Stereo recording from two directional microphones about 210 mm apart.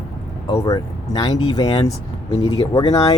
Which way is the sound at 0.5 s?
15° left (ahead or behind).